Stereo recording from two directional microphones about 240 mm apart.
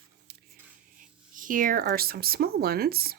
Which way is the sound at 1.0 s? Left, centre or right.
Right.